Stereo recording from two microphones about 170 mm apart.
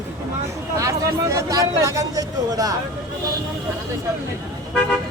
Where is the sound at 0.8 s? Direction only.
20° right (ahead or behind).